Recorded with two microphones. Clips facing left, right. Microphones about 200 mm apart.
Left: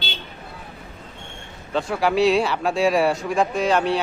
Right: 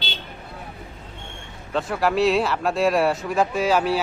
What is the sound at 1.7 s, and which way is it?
Speech, centre (ahead or behind).